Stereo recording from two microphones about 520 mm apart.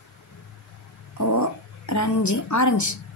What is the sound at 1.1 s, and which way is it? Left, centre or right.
Cat, left.